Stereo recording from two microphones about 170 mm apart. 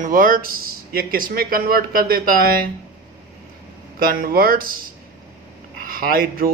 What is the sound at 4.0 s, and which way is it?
Speech, 60° right (ahead or behind).